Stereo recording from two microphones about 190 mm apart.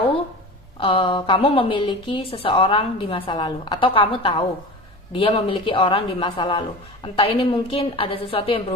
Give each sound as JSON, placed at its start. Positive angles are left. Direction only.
{"t": 0.8, "sound": "a woman's voice", "side_deg": 25}